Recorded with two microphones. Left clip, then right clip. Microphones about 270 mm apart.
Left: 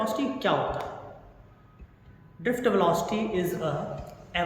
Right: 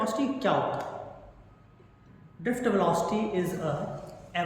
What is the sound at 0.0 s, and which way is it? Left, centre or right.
Speech, centre.